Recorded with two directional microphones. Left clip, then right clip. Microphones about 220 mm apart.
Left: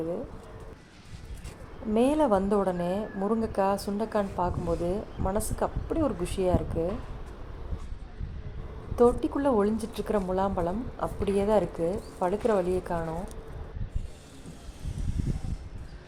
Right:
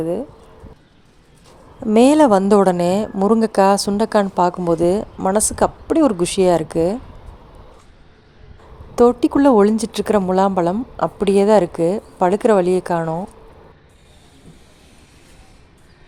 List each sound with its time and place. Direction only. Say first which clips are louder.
1.9 s a woman's voice: right 12 dB; 50° right (ahead or behind)
9.0 s a woman's voice: right 10 dB; 50° right (ahead or behind)